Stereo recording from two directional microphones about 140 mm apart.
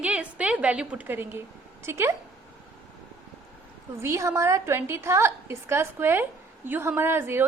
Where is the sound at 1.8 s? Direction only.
15° right (ahead or behind).